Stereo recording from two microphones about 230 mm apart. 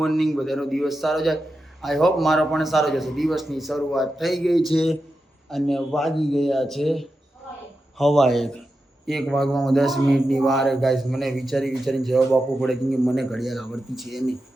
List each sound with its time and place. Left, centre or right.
0.0 s speech: centre